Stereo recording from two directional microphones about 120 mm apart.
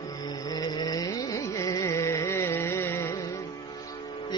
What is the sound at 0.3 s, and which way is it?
Carnatic music, 35° left (ahead or behind).